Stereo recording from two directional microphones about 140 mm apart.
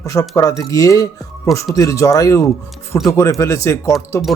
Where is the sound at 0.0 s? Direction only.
25° left (ahead or behind).